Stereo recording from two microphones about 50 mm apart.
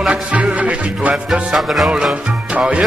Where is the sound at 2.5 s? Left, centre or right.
Right.